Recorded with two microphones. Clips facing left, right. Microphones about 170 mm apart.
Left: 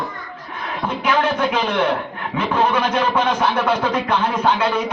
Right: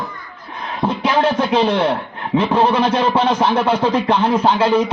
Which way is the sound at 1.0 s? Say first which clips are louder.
Right 2 dB; 30° right (ahead or behind).